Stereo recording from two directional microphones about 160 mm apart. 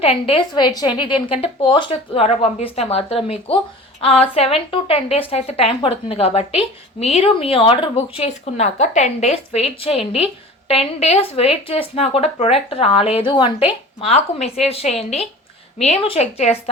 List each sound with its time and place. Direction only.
0.0 s a woman's voice: 35° left (ahead or behind)